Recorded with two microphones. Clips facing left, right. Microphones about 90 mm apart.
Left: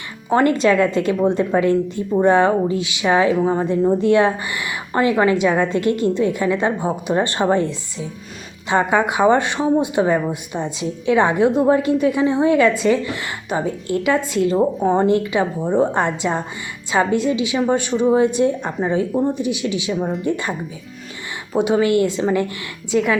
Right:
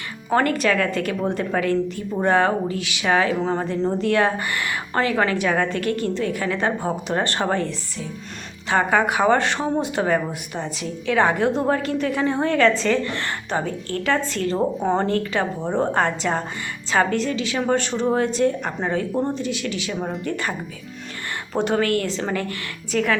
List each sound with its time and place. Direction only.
0.3 s a woman's voice: 20° left (ahead or behind)
20.0 s speech: centre (ahead or behind)
20.2 s a woman's voice: 20° left (ahead or behind)